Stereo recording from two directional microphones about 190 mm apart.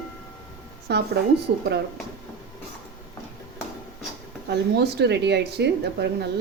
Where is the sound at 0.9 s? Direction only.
60° right (ahead or behind).